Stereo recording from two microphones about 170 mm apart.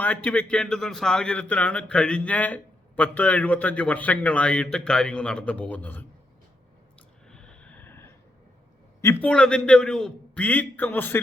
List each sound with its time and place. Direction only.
0.0 s a man's voice: 10° left (ahead or behind)
7.3 s snort: 5° left (ahead or behind)
9.0 s a man's voice: 15° left (ahead or behind)